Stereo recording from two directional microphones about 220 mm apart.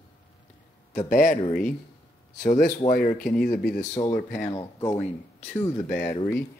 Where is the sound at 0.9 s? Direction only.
40° left (ahead or behind).